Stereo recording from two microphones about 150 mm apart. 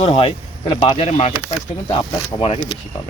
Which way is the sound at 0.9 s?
40° left (ahead or behind).